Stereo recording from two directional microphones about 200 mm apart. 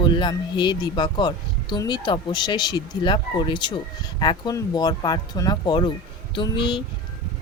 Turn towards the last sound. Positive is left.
turn(degrees=25)  # may be behind; listen again after turning